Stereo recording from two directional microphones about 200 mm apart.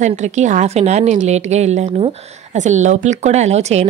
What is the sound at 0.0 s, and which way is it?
A woman's voice, 35° right (ahead or behind).